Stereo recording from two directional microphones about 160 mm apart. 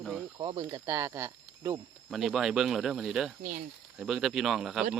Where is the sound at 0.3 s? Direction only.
25° right (ahead or behind).